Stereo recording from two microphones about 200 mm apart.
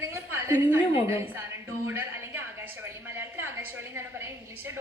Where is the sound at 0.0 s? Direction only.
15° right (ahead or behind).